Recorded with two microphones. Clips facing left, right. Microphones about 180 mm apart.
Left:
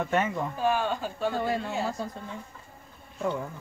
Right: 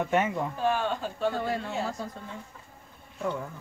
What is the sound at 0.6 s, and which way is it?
Speech, 10° left (ahead or behind).